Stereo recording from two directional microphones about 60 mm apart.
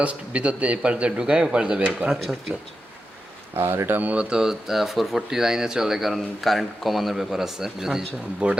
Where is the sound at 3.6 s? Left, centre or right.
Right.